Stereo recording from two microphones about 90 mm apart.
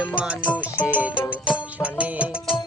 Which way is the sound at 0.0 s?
10° right (ahead or behind).